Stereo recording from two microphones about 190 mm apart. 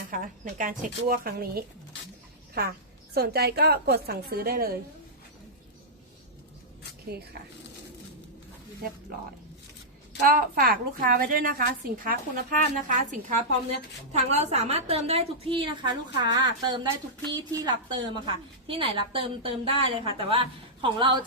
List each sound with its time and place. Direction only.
0.1 s a woman's voice: 45° right (ahead or behind)
7.1 s a woman's voice: 55° right (ahead or behind)
10.2 s a woman's voice: 50° right (ahead or behind); by 21.2 s 25° right (ahead or behind)